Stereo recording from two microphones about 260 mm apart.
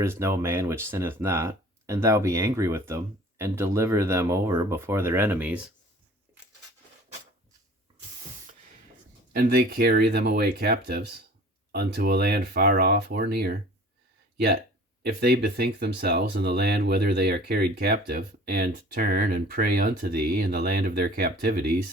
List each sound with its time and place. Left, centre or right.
0.0 s speech: centre
9.3 s speech: right
15.0 s speech: right